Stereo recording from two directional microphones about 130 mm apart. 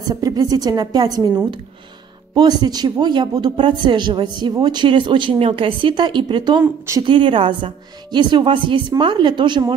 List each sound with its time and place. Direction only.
0.1 s speech: 30° right (ahead or behind)